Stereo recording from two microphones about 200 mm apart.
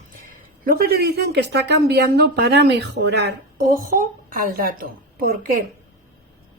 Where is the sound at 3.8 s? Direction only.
40° right (ahead or behind).